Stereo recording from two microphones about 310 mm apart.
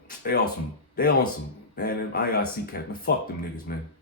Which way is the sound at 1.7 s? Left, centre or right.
Left.